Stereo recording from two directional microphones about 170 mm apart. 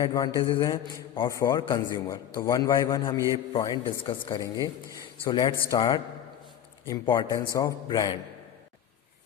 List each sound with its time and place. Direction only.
0.0 s a man's voice: 20° left (ahead or behind)